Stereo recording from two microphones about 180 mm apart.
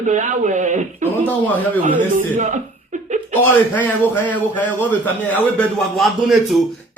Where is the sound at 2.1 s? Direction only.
45° right (ahead or behind).